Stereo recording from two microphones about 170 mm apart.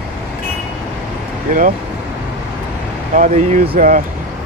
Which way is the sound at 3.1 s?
50° right (ahead or behind).